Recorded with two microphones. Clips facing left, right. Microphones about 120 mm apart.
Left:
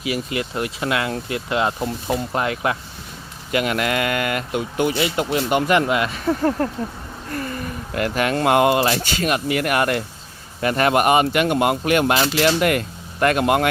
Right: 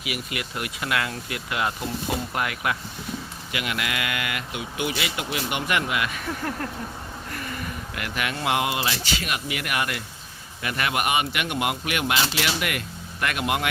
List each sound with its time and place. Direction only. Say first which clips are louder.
0.0 s speech: left 8 dB; 30° left (ahead or behind)
3.5 s speech: left 9 dB; 45° left (ahead or behind)
7.3 s a sound: left 7 dB; 40° left (ahead or behind)
8.4 s speech: left 9 dB; 50° left (ahead or behind)